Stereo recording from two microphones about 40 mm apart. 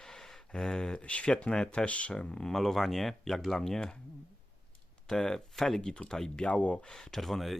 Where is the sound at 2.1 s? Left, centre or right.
Centre.